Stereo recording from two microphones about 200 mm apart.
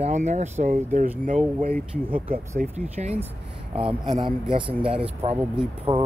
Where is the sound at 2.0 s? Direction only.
25° right (ahead or behind).